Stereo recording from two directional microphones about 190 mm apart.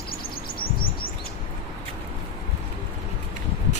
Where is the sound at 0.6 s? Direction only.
50° left (ahead or behind).